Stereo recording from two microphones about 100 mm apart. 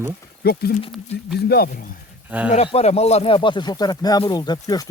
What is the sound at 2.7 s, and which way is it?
Speech, 90° left.